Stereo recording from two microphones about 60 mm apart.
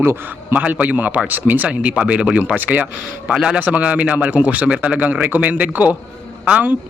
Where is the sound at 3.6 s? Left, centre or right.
Right.